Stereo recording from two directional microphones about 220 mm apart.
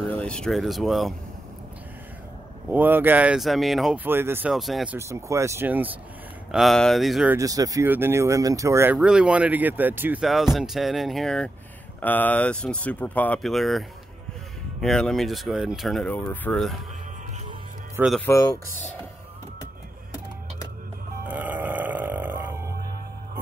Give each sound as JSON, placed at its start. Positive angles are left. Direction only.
{"t": 0.1, "sound": "speech", "side_deg": 5}
{"t": 2.7, "sound": "speech", "side_deg": -10}
{"t": 4.9, "sound": "speech", "side_deg": -10}
{"t": 7.3, "sound": "speech", "side_deg": -15}
{"t": 17.9, "sound": "speech", "side_deg": -5}
{"t": 18.2, "sound": "speech", "side_deg": 10}
{"t": 21.3, "sound": "burping", "side_deg": -10}